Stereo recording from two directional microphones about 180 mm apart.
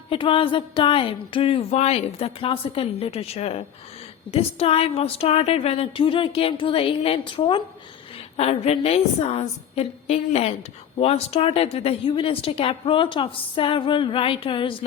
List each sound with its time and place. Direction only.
0.1 s a woman's voice: 30° left (ahead or behind)